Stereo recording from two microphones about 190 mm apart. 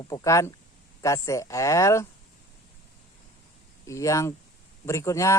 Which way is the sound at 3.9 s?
15° left (ahead or behind).